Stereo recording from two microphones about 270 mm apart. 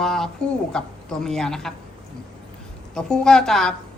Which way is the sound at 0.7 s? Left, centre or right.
Centre.